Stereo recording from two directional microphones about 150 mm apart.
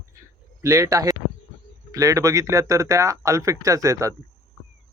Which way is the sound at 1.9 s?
20° right (ahead or behind).